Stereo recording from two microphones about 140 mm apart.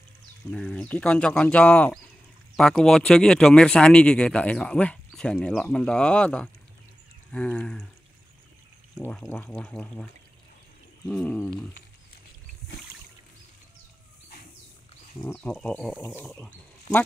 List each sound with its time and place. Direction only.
0.5 s speech: 5° left (ahead or behind)
9.3 s speech: 5° left (ahead or behind)
11.1 s speech: 5° left (ahead or behind)
15.2 s speech: 10° left (ahead or behind)
16.0 s speech: 20° left (ahead or behind)